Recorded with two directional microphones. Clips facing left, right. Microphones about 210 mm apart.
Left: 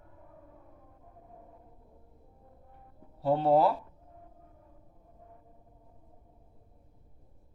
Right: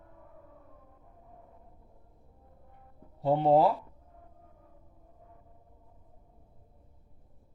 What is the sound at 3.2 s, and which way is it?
Speech, 20° right (ahead or behind).